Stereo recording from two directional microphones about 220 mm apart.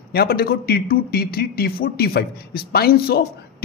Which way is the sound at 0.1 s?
45° left (ahead or behind).